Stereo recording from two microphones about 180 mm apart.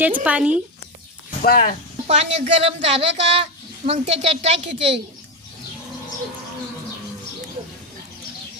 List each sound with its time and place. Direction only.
0.2 s speech: 5° right (ahead or behind)
1.4 s speech: 55° left (ahead or behind)
2.0 s a woman's voice: 35° right (ahead or behind)